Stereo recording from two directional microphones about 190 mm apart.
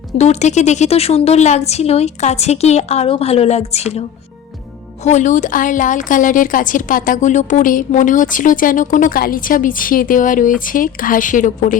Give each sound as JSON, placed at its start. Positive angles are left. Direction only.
{"t": 0.2, "sound": "speech", "side_deg": 35}
{"t": 5.0, "sound": "a woman's voice", "side_deg": 40}